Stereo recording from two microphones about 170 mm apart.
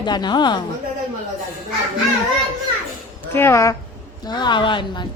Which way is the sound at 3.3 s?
15° left (ahead or behind).